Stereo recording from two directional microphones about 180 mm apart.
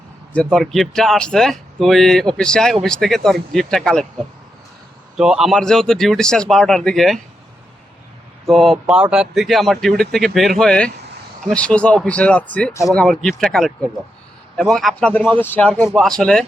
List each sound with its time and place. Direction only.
0.3 s speech: centre (ahead or behind)
5.1 s speech: 5° right (ahead or behind)
8.4 s speech: centre (ahead or behind)